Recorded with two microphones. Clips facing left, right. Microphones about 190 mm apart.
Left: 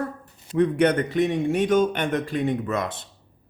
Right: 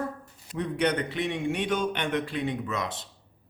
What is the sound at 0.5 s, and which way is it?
A man's voice, 50° left (ahead or behind).